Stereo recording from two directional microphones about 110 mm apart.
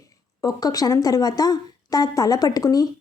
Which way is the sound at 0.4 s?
35° left (ahead or behind).